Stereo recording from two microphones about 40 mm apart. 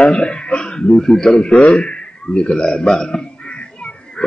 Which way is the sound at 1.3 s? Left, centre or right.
Left.